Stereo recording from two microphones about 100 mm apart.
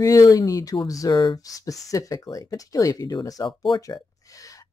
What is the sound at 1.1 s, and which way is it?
Speech, 60° left (ahead or behind).